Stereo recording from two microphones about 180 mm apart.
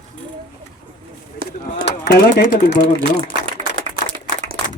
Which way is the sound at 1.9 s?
70° left (ahead or behind).